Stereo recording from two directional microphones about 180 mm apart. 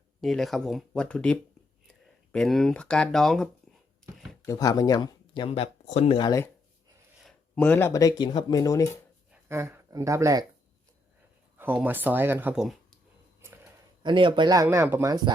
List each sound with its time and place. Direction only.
0.2 s speech: centre (ahead or behind)
4.0 s a sound: 5° left (ahead or behind)
4.4 s speech: 20° left (ahead or behind)
7.2 s speech: 5° left (ahead or behind)
9.3 s speech: 15° right (ahead or behind)
11.5 s speech: 10° right (ahead or behind)
14.0 s speech: 25° right (ahead or behind)